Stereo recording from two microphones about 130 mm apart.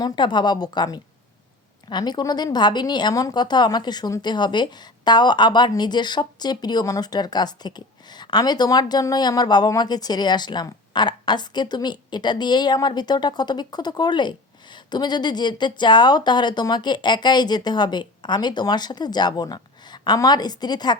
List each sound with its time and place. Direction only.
0.0 s a woman's voice: 35° left (ahead or behind)